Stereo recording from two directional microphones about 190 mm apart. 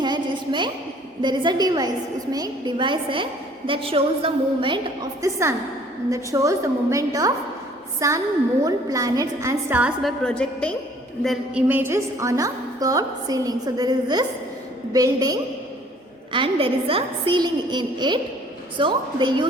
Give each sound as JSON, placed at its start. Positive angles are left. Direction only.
{"t": 0.0, "sound": "a sound", "side_deg": -25}
{"t": 1.2, "sound": "a woman's voice", "side_deg": -25}
{"t": 11.7, "sound": "a woman's voice", "side_deg": -10}